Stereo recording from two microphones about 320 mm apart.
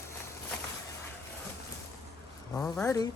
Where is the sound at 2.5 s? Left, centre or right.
Centre.